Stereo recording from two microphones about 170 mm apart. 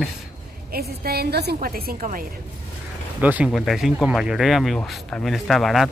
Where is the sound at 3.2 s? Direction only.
10° right (ahead or behind).